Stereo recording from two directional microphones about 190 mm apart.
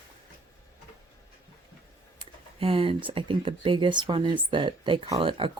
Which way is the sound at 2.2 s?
30° right (ahead or behind).